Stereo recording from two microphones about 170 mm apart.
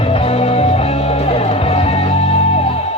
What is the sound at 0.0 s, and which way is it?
Music, 35° left (ahead or behind).